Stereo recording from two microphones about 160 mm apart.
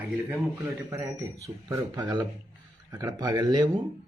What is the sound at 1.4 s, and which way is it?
Speech, 20° right (ahead or behind).